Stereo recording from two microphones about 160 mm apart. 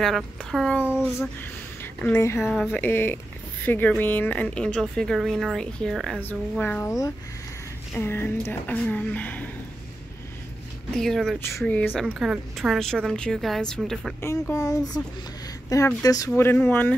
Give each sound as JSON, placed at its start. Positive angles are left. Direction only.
{"t": 0.0, "sound": "speech", "side_deg": 0}
{"t": 1.4, "sound": "speech", "side_deg": 10}
{"t": 2.4, "sound": "speech", "side_deg": 0}
{"t": 2.7, "sound": "speech", "side_deg": 10}
{"t": 6.6, "sound": "speech", "side_deg": 10}
{"t": 11.0, "sound": "speech", "side_deg": 0}
{"t": 11.3, "sound": "speech", "side_deg": 15}
{"t": 12.1, "sound": "speech", "side_deg": -5}
{"t": 14.2, "sound": "speech", "side_deg": 15}